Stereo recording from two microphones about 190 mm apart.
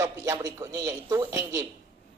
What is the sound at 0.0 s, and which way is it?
A man's voice, 15° right (ahead or behind).